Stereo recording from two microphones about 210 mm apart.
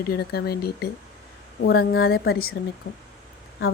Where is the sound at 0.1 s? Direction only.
50° left (ahead or behind).